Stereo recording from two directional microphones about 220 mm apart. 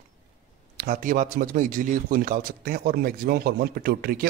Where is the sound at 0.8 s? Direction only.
40° right (ahead or behind).